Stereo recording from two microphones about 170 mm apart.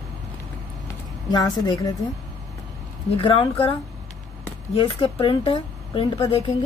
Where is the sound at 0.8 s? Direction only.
20° left (ahead or behind).